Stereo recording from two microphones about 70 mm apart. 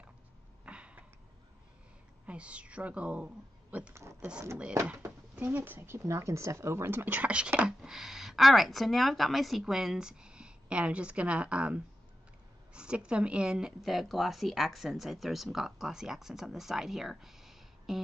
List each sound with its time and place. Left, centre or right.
0.7 s a sound: centre
2.2 s a woman's voice: centre
3.9 s speech: right
5.4 s speech: right; by 18.0 s centre